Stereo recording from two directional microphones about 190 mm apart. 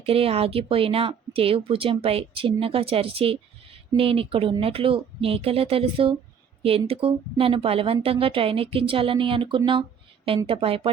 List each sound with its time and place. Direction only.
0.0 s a woman's voice: 30° right (ahead or behind)